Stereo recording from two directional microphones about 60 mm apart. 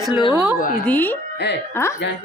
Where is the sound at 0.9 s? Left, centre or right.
Left.